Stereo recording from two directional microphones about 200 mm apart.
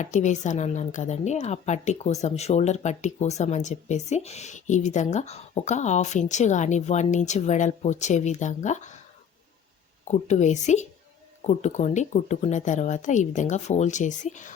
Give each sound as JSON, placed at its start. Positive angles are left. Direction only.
{"t": 0.0, "sound": "a woman's voice", "side_deg": 35}
{"t": 10.1, "sound": "a woman's voice", "side_deg": 35}